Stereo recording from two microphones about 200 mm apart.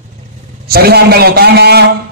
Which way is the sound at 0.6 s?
50° right (ahead or behind).